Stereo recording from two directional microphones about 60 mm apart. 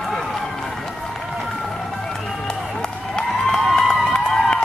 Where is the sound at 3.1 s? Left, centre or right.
Centre.